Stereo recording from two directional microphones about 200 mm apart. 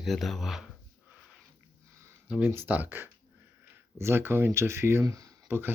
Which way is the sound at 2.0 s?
5° right (ahead or behind).